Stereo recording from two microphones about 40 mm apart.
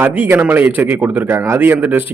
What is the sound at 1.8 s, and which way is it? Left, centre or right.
Speech, right.